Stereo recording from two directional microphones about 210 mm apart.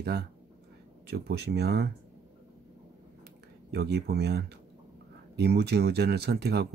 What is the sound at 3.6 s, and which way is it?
Speech, 50° right (ahead or behind).